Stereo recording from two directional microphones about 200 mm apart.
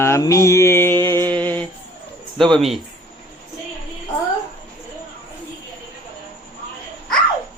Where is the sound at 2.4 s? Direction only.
Centre (ahead or behind).